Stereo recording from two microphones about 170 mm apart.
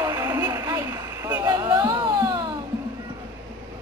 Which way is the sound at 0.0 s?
20° right (ahead or behind).